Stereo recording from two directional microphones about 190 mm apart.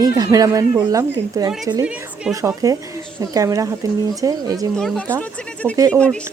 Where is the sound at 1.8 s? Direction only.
5° right (ahead or behind).